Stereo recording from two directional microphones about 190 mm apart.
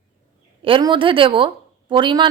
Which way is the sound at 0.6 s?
25° right (ahead or behind).